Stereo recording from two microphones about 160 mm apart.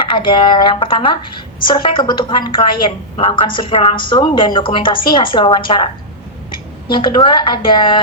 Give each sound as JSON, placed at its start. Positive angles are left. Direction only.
{"t": 0.1, "sound": "a woman's voice", "side_deg": 30}